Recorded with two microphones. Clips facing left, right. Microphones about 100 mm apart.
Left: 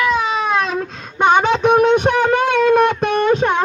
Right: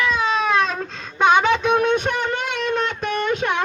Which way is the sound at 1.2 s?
20° left (ahead or behind).